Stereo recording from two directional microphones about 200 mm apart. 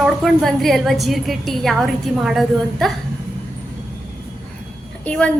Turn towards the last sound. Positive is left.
turn(degrees=5)  # may be behind; listen again after turning